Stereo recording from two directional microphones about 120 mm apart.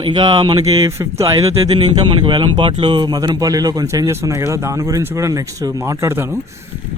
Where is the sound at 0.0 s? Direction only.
45° right (ahead or behind).